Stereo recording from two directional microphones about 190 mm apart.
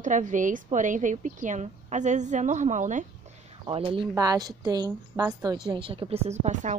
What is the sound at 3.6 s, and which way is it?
A woman's voice, 30° right (ahead or behind).